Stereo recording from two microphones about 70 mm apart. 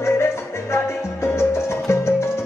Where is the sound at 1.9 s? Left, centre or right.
Left.